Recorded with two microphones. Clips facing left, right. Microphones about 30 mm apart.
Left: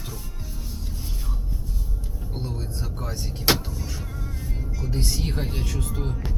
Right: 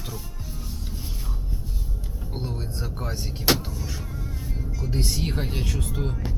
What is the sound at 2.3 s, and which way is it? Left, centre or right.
Speech, centre.